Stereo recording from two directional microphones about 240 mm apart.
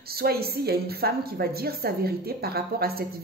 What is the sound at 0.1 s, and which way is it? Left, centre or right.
A woman's voice, right.